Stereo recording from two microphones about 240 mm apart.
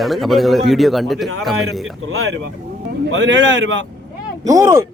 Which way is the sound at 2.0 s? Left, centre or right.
Right.